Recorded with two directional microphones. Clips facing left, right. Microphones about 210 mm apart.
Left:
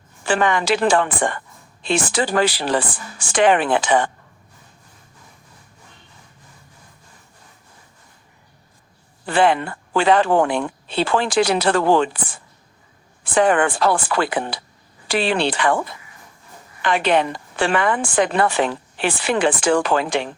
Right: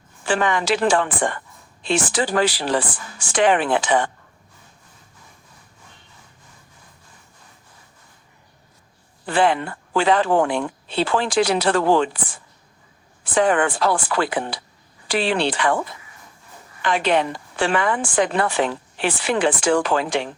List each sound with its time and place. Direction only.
0.3 s a woman's voice: 60° left (ahead or behind)
9.3 s a woman's voice: 60° left (ahead or behind)
13.3 s a woman's voice: 60° left (ahead or behind)
16.8 s a woman's voice: 60° left (ahead or behind)